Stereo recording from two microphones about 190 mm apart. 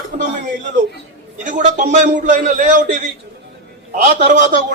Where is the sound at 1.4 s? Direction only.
40° right (ahead or behind).